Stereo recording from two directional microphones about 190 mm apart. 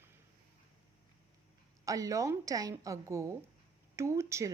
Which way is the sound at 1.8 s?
15° right (ahead or behind).